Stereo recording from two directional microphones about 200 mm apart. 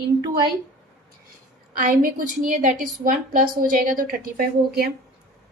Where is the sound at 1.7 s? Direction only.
45° right (ahead or behind).